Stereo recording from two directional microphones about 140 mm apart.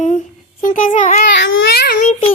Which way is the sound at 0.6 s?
70° left (ahead or behind).